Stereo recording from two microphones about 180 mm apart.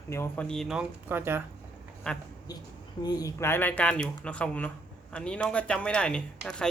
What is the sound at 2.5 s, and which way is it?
Speech, 20° left (ahead or behind).